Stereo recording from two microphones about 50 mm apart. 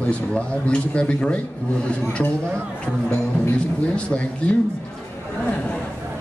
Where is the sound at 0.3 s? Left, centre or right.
Left.